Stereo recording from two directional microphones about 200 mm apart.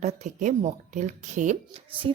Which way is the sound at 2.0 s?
25° right (ahead or behind).